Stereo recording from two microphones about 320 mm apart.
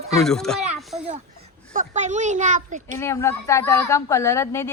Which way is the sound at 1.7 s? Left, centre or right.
Right.